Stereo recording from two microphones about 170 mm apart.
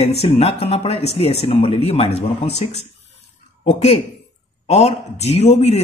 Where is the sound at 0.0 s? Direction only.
35° left (ahead or behind).